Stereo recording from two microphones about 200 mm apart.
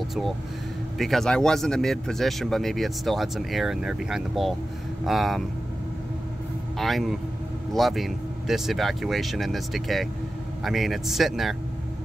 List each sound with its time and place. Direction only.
0.9 s speech: centre (ahead or behind)
6.8 s speech: centre (ahead or behind)